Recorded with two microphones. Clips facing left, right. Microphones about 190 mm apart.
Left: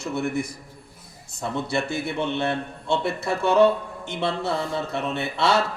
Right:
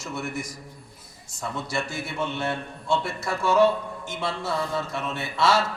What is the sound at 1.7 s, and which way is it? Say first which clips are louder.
A man's voice: left 4 dB; 60° left (ahead or behind).